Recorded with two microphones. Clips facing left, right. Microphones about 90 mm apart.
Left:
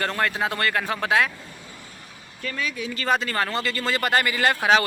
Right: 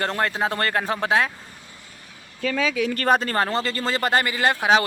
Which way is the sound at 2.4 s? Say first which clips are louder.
Right 7 dB; 80° right.